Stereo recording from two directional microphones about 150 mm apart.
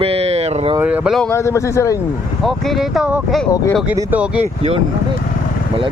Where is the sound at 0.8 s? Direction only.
10° right (ahead or behind).